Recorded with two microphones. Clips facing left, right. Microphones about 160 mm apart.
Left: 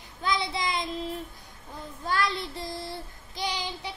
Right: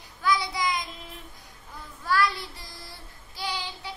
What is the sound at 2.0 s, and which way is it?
Child singing, 20° left (ahead or behind).